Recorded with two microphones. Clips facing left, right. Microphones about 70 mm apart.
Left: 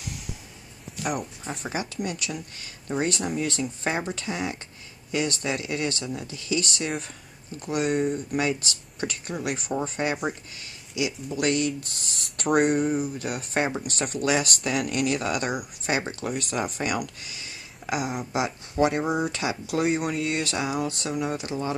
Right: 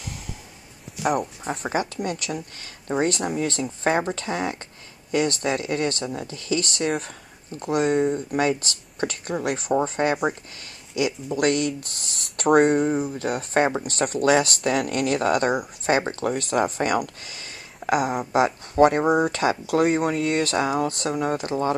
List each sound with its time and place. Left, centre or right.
1.0 s speech: right
12.4 s speech: right